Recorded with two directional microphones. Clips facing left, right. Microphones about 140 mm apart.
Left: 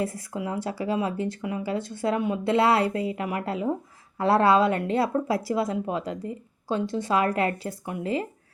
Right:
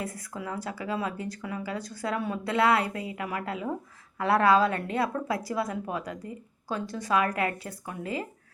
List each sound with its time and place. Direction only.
0.0 s speech: 25° left (ahead or behind)